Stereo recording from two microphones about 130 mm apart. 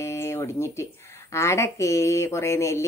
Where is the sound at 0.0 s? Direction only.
20° left (ahead or behind).